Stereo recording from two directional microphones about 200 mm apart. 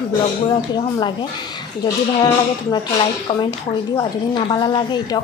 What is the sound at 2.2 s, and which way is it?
A woman's voice, 20° left (ahead or behind).